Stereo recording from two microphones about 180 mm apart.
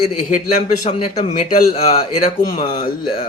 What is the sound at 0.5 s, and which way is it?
A man's voice, 40° left (ahead or behind).